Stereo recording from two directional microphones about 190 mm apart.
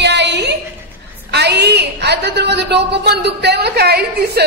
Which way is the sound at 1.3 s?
60° right (ahead or behind).